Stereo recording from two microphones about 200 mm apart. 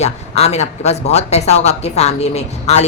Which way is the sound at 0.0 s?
35° left (ahead or behind).